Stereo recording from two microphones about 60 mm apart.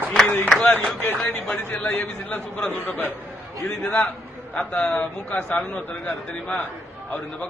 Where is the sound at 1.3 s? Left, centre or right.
Left.